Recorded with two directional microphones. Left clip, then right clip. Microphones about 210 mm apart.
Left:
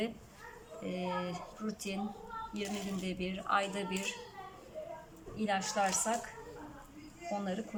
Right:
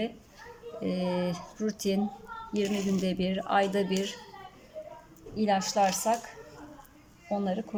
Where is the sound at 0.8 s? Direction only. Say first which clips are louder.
Right 7 dB; 25° right (ahead or behind).